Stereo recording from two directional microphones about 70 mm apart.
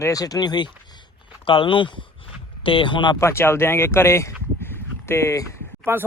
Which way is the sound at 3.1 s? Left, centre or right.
Left.